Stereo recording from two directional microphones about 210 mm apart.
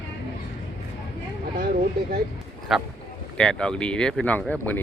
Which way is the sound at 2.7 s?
Centre (ahead or behind).